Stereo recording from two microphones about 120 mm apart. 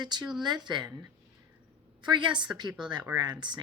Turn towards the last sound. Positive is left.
turn(degrees=-40)  # may be behind; listen again after turning